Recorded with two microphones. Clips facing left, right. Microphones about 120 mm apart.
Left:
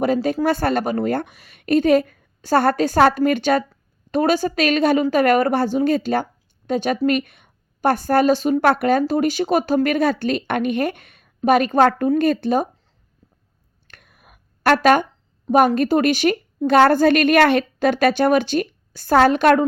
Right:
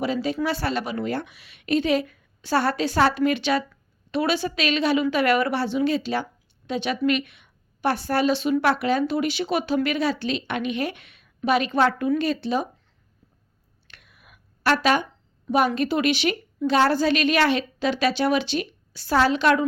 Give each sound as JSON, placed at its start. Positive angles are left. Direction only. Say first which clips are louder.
{"t": 0.0, "sound": "a woman's voice", "louder": "left 6 dB", "side_deg": 50}
{"t": 13.8, "sound": "a sound", "louder": "left 3 dB", "side_deg": 45}
{"t": 15.4, "sound": "a woman's voice", "louder": "left 6 dB", "side_deg": 50}